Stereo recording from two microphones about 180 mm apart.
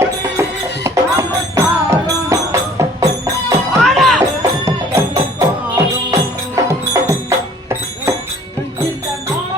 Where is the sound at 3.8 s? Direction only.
Centre (ahead or behind).